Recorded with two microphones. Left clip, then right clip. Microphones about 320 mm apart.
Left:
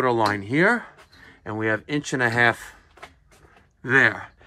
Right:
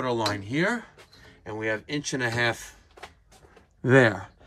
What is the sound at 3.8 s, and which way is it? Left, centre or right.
Speech, right.